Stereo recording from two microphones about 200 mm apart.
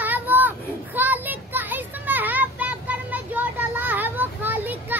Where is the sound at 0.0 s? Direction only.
10° right (ahead or behind).